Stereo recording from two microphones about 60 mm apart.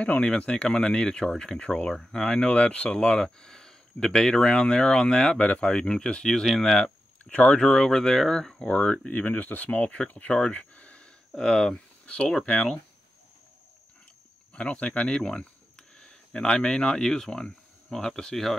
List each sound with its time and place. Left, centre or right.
0.0 s speech: centre
7.6 s speech: centre
11.3 s speech: centre
14.5 s speech: centre